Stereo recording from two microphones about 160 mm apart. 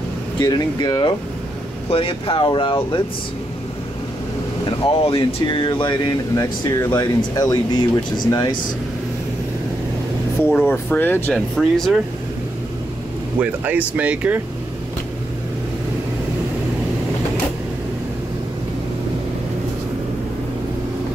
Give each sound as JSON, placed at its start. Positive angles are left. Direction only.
{"t": 0.4, "sound": "speech", "side_deg": 25}
{"t": 4.6, "sound": "speech", "side_deg": 30}
{"t": 10.4, "sound": "speech", "side_deg": 10}
{"t": 13.4, "sound": "speech", "side_deg": -10}